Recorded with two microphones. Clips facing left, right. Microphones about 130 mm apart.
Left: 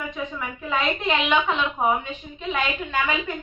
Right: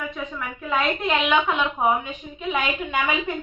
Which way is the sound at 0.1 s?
Centre (ahead or behind).